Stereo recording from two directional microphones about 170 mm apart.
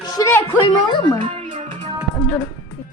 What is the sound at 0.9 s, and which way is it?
Speech, 25° left (ahead or behind).